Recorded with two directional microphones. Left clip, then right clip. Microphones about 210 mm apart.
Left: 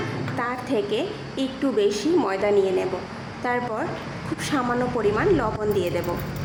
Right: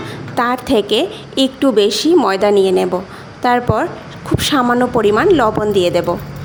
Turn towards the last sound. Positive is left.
turn(degrees=-45)  # may be behind; listen again after turning